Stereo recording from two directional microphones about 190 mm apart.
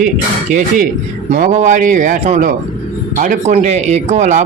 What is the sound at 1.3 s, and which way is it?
Speech, 40° right (ahead or behind).